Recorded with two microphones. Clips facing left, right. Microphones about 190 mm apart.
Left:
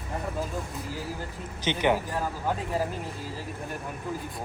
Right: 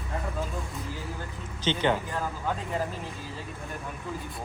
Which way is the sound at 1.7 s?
10° left (ahead or behind).